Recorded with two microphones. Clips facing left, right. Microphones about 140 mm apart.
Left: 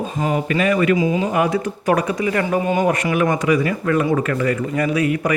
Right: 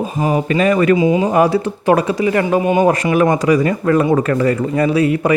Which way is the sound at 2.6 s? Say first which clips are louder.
Right 5 dB; 15° right (ahead or behind).